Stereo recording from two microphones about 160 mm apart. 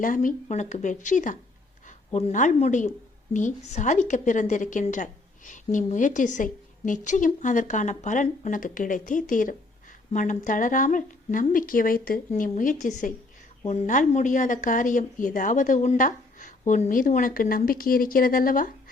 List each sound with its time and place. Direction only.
0.0 s a woman's voice: 55° left (ahead or behind)